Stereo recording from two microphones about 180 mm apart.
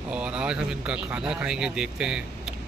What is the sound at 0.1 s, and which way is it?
Speech, 5° right (ahead or behind).